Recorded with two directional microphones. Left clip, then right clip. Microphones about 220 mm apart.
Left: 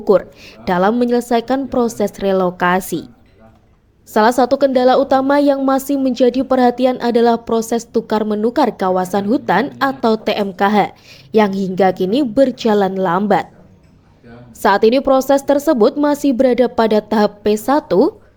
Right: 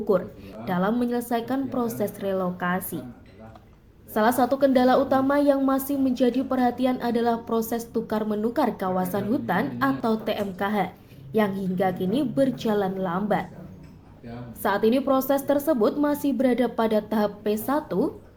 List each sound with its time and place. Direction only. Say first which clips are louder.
0.1 s a woman's voice: left 11 dB; 40° left (ahead or behind)
4.1 s a woman's voice: left 9 dB; 40° left (ahead or behind)
14.6 s a woman's voice: left 11 dB; 40° left (ahead or behind)